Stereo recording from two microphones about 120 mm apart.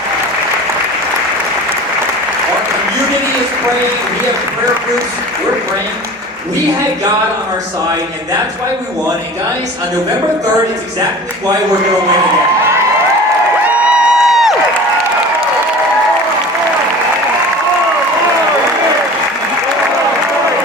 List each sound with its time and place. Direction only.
13.7 s crowd: 10° right (ahead or behind)